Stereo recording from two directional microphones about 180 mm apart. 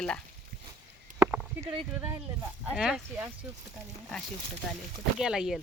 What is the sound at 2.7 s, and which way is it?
Speech, 5° right (ahead or behind).